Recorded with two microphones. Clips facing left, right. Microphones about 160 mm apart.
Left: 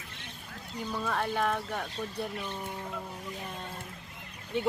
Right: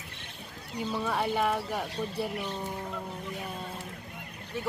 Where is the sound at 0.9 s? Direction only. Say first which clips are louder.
Right 2 dB; 10° right (ahead or behind).